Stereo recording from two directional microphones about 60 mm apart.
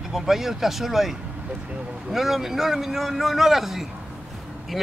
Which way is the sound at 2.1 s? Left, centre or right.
Centre.